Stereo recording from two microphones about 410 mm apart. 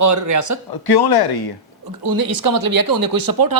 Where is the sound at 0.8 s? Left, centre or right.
Left.